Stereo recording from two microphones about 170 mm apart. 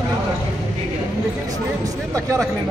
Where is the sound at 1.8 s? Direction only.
20° right (ahead or behind).